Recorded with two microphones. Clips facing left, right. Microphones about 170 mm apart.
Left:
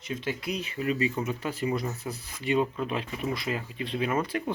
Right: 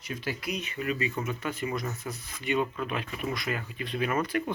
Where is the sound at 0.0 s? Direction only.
25° left (ahead or behind).